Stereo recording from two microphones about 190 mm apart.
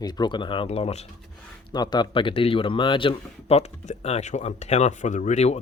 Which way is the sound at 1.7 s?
20° left (ahead or behind).